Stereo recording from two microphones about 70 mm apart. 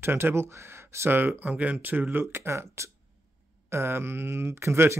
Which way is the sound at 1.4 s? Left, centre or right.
Right.